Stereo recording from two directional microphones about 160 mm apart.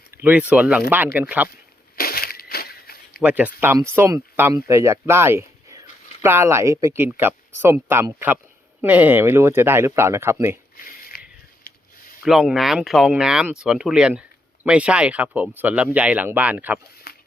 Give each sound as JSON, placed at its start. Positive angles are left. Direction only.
{"t": 0.1, "sound": "speech", "side_deg": -10}
{"t": 2.0, "sound": "a sound", "side_deg": 70}
{"t": 3.2, "sound": "speech", "side_deg": -10}
{"t": 10.8, "sound": "a sound", "side_deg": 60}
{"t": 12.2, "sound": "speech", "side_deg": 0}
{"t": 17.1, "sound": "shuffle", "side_deg": 90}